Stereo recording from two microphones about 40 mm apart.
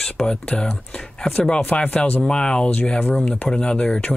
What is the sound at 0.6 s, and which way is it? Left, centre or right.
Speech, centre.